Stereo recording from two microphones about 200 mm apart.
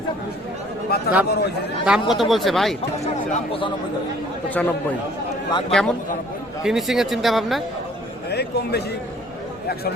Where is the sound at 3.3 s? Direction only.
25° left (ahead or behind).